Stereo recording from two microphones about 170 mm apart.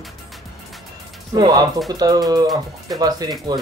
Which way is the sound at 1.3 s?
25° right (ahead or behind).